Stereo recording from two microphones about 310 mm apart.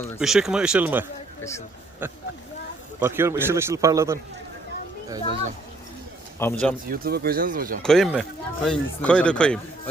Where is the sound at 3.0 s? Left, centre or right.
Centre.